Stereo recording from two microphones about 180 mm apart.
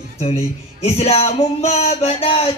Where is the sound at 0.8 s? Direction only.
35° left (ahead or behind).